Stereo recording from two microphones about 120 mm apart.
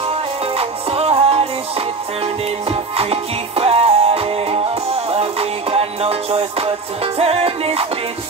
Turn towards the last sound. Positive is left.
turn(degrees=-55)  # may be behind; listen again after turning